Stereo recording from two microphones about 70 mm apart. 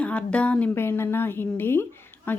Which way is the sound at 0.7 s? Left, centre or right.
Left.